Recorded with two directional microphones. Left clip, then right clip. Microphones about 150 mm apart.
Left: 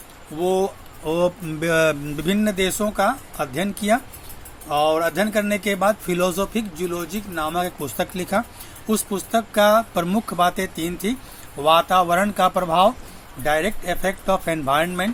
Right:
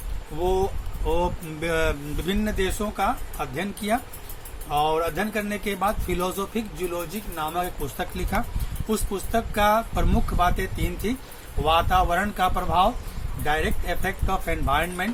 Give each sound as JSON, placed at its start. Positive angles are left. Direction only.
{"t": 1.0, "sound": "speech", "side_deg": 45}